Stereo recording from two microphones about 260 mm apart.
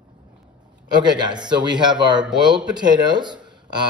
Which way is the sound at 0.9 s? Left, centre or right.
Centre.